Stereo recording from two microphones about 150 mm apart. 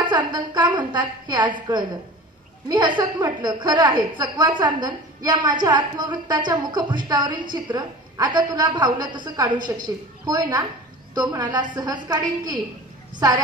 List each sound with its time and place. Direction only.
0.0 s a woman's voice: 30° right (ahead or behind)